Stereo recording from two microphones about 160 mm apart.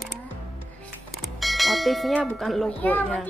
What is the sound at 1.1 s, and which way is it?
Bell, centre (ahead or behind).